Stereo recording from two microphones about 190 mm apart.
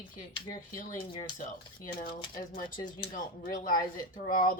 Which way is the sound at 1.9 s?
25° left (ahead or behind).